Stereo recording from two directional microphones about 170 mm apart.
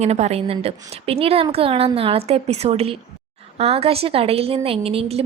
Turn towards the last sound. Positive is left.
turn(degrees=-35)  # may be behind; listen again after turning